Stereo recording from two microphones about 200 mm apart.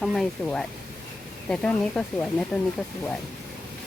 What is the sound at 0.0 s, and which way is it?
Speech, centre (ahead or behind).